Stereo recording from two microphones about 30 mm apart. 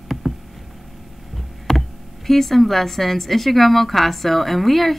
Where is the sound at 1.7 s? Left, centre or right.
Centre.